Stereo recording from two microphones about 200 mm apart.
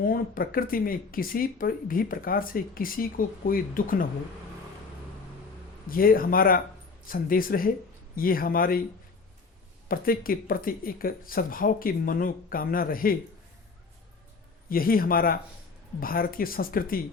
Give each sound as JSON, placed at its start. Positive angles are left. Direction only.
{"t": 0.0, "sound": "speech", "side_deg": 45}
{"t": 5.9, "sound": "speech", "side_deg": 45}
{"t": 9.9, "sound": "speech", "side_deg": 45}
{"t": 14.7, "sound": "speech", "side_deg": 45}